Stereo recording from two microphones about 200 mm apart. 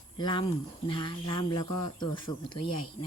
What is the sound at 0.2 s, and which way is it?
Speech, 25° left (ahead or behind).